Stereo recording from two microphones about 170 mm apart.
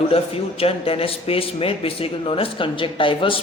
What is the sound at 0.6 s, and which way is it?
A man's voice, 35° left (ahead or behind).